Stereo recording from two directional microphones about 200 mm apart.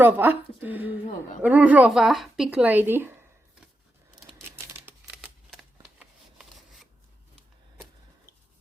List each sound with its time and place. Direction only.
0.0 s speech: 10° right (ahead or behind)
4.4 s a sound: 10° right (ahead or behind)
6.0 s shuffling cards: centre (ahead or behind)